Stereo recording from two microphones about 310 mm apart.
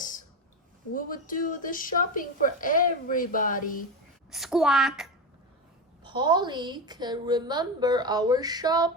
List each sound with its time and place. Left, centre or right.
0.0 s a sound: left
0.9 s a woman's voice: left
4.3 s a woman's voice: centre
6.0 s a woman's voice: centre